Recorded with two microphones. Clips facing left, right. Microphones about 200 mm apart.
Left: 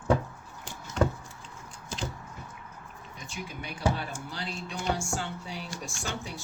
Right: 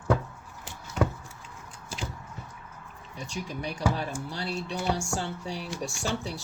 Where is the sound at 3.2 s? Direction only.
35° right (ahead or behind).